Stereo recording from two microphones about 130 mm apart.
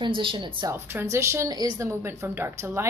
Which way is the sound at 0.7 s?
20° right (ahead or behind).